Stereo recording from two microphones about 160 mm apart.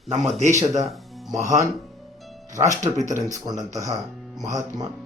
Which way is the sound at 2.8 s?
20° right (ahead or behind).